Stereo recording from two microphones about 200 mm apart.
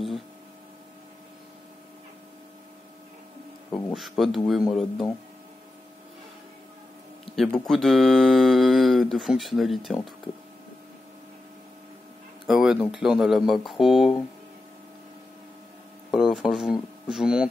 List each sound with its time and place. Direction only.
3.7 s speech: centre (ahead or behind)
7.3 s speech: centre (ahead or behind)
12.4 s speech: centre (ahead or behind)
16.1 s speech: centre (ahead or behind)